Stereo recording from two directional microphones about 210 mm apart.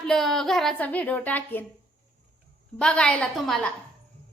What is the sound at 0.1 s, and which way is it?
A woman's voice, centre (ahead or behind).